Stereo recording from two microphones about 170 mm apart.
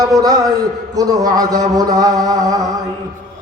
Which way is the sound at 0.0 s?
20° right (ahead or behind).